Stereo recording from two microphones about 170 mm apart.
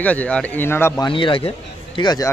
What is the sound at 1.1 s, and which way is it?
Speech, 30° left (ahead or behind).